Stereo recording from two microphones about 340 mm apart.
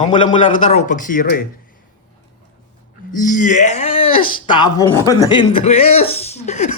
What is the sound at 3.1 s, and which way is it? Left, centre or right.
Speech, left.